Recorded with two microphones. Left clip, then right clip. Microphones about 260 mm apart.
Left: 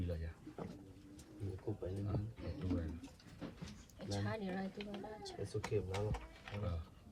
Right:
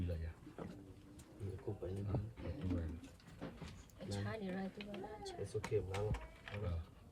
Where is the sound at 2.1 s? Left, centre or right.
Left.